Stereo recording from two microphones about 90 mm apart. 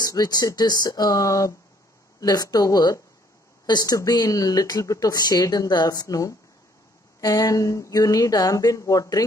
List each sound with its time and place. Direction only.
0.0 s speech: 50° left (ahead or behind)